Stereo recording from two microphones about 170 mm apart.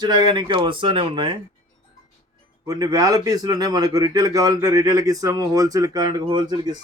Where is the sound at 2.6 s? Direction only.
20° right (ahead or behind).